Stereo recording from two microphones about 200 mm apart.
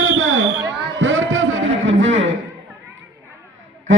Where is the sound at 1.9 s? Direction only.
70° right (ahead or behind).